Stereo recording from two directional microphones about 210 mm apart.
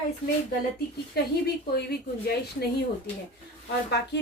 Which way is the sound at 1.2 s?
50° left (ahead or behind).